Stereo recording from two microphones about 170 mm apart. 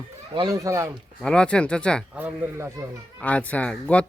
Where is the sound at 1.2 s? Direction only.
5° left (ahead or behind).